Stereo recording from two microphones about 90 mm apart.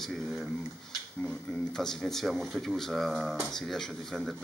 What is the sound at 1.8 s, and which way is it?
Speech, 5° left (ahead or behind).